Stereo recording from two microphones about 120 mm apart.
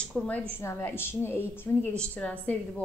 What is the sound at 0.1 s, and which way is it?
A woman's voice, 10° left (ahead or behind).